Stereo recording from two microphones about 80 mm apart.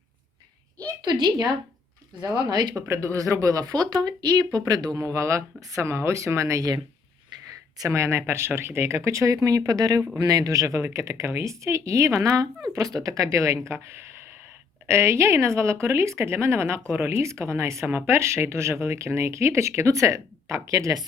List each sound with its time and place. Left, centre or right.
1.2 s speech: right
2.8 s speech: right
4.9 s speech: right
7.8 s speech: right